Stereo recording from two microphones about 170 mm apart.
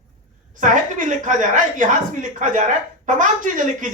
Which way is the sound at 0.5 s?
50° right (ahead or behind).